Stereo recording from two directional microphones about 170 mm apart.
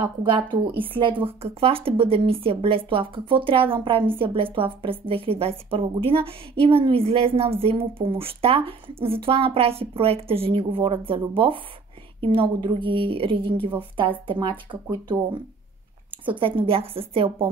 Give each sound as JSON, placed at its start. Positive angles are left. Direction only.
{"t": 0.0, "sound": "a woman's voice", "side_deg": -30}